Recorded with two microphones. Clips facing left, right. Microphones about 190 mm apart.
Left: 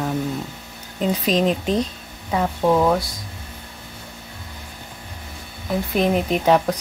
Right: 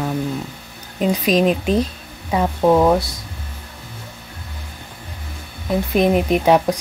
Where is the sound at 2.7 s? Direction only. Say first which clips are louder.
Right 3 dB; 30° right (ahead or behind).